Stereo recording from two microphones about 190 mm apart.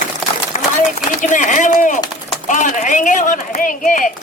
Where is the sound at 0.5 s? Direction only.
40° left (ahead or behind).